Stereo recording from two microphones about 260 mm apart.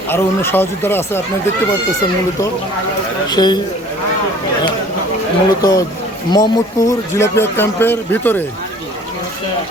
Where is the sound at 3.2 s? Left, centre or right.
Centre.